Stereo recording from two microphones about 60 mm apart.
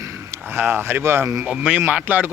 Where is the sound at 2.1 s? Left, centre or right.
Right.